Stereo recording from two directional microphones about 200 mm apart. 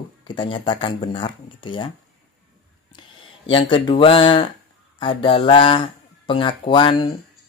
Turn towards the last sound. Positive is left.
turn(degrees=25)  # may be behind; listen again after turning